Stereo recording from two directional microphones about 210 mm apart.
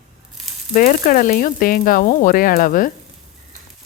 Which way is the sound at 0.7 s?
40° left (ahead or behind).